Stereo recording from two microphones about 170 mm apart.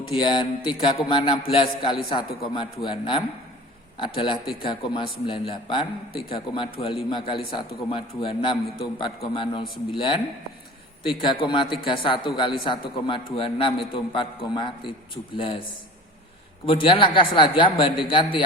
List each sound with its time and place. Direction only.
0.1 s a man's voice: 30° left (ahead or behind)
16.6 s a man's voice: 30° left (ahead or behind)